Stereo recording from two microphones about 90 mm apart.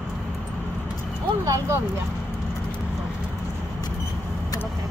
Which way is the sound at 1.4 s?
40° right (ahead or behind).